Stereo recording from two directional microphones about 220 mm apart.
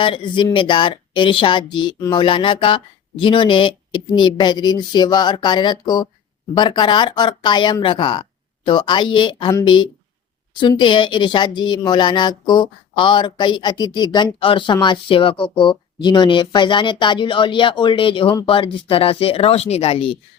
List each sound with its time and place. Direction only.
0.0 s speech: 20° left (ahead or behind)